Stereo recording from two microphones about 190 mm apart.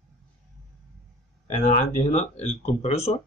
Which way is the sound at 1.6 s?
35° left (ahead or behind).